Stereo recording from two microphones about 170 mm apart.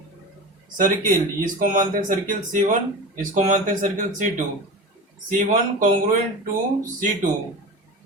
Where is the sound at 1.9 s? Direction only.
50° right (ahead or behind).